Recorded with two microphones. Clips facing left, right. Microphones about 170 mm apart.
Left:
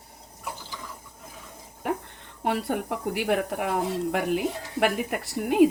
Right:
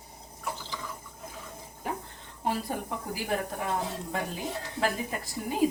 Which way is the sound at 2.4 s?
75° left (ahead or behind).